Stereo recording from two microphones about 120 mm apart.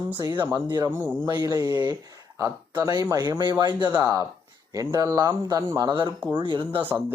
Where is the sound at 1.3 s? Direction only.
35° right (ahead or behind).